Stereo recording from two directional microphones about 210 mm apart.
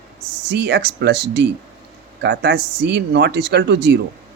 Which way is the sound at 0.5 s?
55° right (ahead or behind).